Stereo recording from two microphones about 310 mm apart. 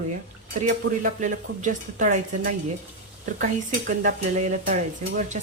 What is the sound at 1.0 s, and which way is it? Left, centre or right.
Speech, right.